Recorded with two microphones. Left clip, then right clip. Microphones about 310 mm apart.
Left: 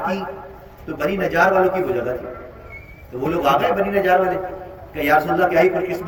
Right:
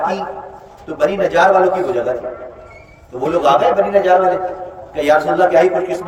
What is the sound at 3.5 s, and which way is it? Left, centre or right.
A man's voice, right.